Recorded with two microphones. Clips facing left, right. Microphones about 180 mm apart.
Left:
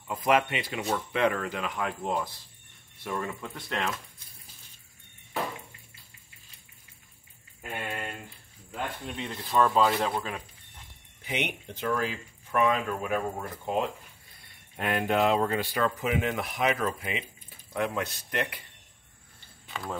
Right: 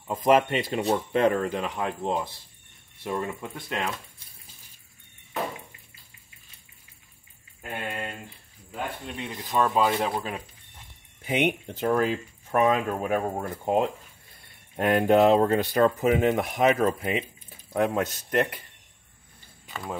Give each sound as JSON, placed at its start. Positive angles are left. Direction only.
{"t": 0.1, "sound": "speech", "side_deg": -45}
{"t": 0.7, "sound": "speech", "side_deg": -30}
{"t": 8.7, "sound": "speech", "side_deg": 0}
{"t": 9.3, "sound": "speech", "side_deg": -15}
{"t": 11.2, "sound": "speech", "side_deg": -50}
{"t": 19.7, "sound": "speech", "side_deg": -10}